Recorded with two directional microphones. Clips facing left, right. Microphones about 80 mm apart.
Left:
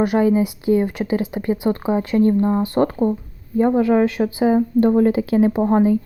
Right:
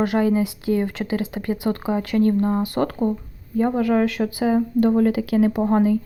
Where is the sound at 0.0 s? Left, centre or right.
Left.